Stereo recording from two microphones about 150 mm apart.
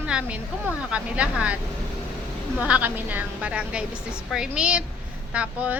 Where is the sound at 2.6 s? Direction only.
10° right (ahead or behind).